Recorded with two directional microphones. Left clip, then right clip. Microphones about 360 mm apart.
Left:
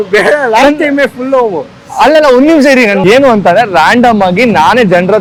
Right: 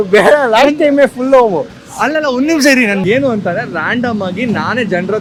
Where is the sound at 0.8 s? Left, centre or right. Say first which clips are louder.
Even; right.